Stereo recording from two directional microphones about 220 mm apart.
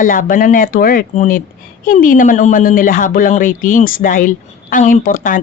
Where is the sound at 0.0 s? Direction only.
40° left (ahead or behind).